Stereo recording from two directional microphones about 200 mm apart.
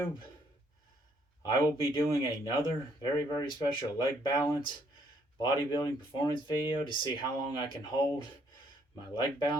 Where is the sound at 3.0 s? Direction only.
20° left (ahead or behind).